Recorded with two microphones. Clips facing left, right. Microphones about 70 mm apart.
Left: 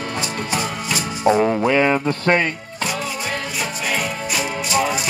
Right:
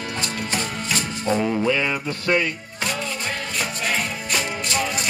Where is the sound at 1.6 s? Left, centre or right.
Left.